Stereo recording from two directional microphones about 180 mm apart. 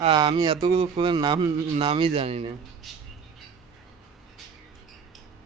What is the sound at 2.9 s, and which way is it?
Bird, centre (ahead or behind).